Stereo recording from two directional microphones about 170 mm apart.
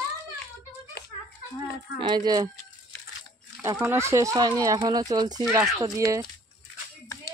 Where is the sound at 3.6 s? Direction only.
15° right (ahead or behind).